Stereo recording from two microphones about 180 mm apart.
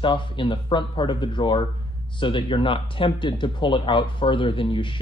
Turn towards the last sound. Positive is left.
turn(degrees=30)  # may be behind; listen again after turning